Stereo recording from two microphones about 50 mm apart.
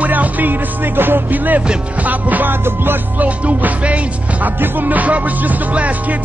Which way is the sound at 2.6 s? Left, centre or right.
Right.